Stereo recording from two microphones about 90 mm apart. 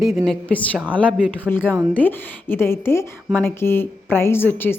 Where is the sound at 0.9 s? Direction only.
15° left (ahead or behind).